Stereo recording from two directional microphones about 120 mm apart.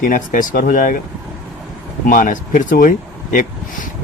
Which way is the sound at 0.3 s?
90° left.